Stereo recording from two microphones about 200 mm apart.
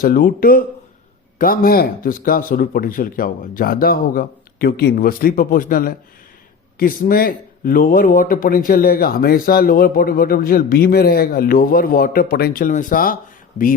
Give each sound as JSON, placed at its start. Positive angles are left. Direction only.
{"t": 0.0, "sound": "speech", "side_deg": 45}